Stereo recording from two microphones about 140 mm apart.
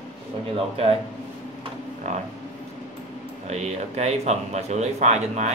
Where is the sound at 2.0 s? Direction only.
55° right (ahead or behind).